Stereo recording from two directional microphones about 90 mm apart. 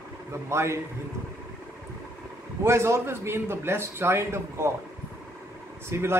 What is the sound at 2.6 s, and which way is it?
A man's voice, 30° right (ahead or behind).